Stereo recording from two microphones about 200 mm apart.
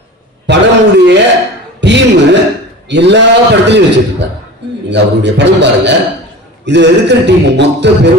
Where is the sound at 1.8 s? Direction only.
60° right (ahead or behind).